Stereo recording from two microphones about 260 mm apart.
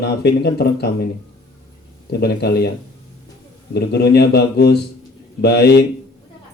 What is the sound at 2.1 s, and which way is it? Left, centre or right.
Speech, left.